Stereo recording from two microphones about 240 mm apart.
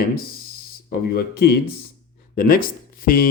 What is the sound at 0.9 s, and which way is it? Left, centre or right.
Speech, left.